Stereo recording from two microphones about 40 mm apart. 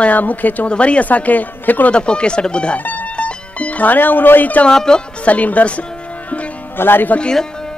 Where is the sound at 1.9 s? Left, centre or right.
Left.